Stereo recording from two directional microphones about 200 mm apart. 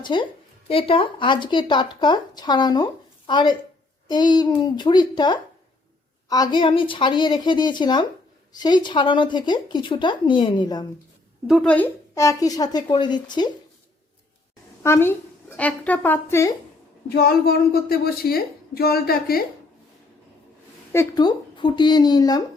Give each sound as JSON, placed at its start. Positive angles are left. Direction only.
{"t": 0.0, "sound": "speech", "side_deg": 25}
{"t": 11.4, "sound": "speech", "side_deg": 0}
{"t": 14.8, "sound": "a woman's voice", "side_deg": 10}
{"t": 17.2, "sound": "a woman's voice", "side_deg": 50}
{"t": 20.9, "sound": "speech", "side_deg": 15}